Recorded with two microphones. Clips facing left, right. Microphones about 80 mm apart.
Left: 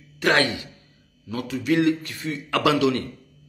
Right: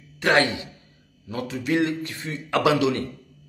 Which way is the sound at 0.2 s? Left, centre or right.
Centre.